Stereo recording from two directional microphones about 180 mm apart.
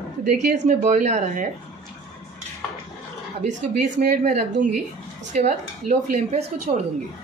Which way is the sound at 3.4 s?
40° right (ahead or behind).